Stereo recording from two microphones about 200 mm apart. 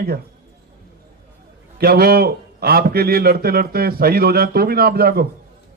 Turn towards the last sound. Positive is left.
turn(degrees=-50)  # may be behind; listen again after turning